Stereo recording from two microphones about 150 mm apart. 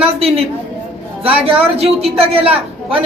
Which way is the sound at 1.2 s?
40° right (ahead or behind).